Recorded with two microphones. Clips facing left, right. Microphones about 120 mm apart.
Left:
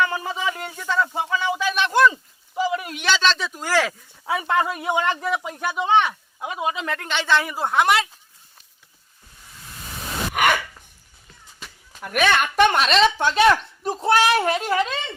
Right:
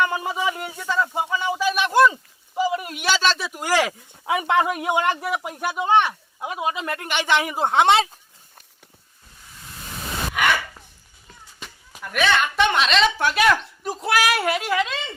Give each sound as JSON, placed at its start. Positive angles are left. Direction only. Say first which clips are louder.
{"t": 0.0, "sound": "speech", "louder": "right 1 dB", "side_deg": -10}
{"t": 11.6, "sound": "a sound", "louder": "right 2 dB", "side_deg": 0}
{"t": 12.0, "sound": "speech", "louder": "left 1 dB", "side_deg": 50}
{"t": 13.1, "sound": "speech", "louder": "left 2 dB", "side_deg": 25}